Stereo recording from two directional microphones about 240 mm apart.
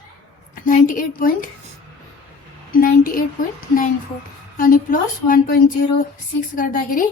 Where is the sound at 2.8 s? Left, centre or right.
Left.